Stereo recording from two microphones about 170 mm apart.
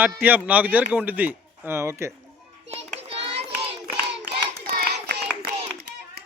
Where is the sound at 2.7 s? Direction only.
35° right (ahead or behind).